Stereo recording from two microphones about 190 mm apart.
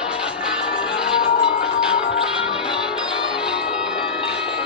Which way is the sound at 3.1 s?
5° right (ahead or behind).